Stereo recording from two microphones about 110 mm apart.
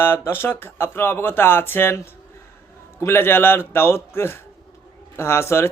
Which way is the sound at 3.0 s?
20° left (ahead or behind).